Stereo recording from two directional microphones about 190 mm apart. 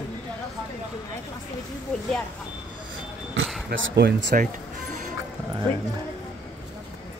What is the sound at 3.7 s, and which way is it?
Speech, 55° right (ahead or behind).